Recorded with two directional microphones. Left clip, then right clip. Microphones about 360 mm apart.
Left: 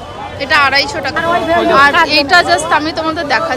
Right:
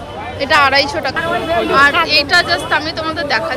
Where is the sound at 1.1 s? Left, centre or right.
Left.